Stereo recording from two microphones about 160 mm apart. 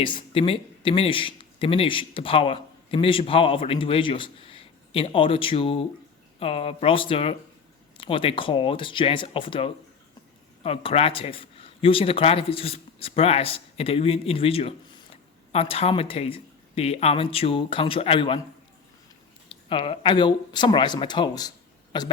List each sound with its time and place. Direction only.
0.0 s speech: 35° left (ahead or behind)
19.6 s speech: 35° left (ahead or behind)